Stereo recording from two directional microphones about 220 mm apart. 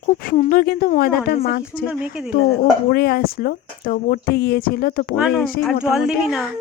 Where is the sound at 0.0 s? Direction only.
40° left (ahead or behind).